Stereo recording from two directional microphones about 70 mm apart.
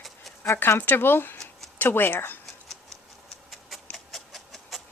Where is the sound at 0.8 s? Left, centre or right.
Left.